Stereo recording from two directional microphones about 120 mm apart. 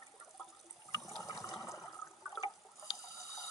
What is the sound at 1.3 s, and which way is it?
Water, 30° left (ahead or behind).